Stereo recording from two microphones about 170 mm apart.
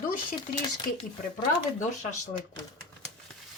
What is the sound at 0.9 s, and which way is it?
Speech, 55° left (ahead or behind).